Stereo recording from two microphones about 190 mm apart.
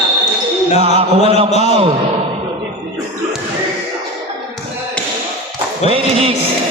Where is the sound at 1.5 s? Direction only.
35° left (ahead or behind).